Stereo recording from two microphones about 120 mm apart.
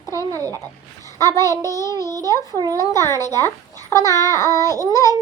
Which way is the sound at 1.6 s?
25° left (ahead or behind).